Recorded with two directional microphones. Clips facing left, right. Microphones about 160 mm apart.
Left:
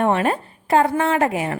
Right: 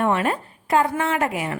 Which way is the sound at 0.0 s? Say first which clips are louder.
Left 2 dB; 30° left (ahead or behind).